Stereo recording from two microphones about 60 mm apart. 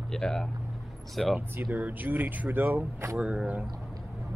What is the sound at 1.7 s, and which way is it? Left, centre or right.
Speech, right.